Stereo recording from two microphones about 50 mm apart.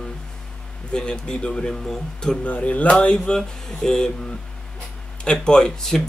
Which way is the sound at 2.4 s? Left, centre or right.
Left.